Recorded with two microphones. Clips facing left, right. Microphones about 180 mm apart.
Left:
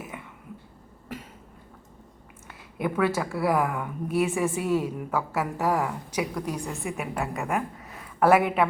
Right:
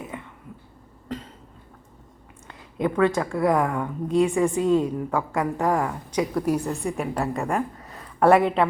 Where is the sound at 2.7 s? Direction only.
20° right (ahead or behind).